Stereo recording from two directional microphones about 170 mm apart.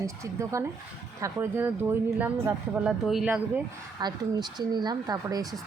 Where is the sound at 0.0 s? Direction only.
15° right (ahead or behind).